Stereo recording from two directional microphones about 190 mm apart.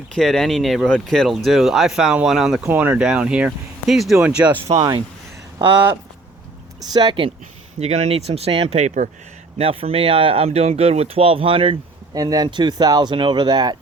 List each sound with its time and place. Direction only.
0.1 s speech: centre (ahead or behind)
6.7 s speech: 20° right (ahead or behind)
7.8 s speech: 35° right (ahead or behind)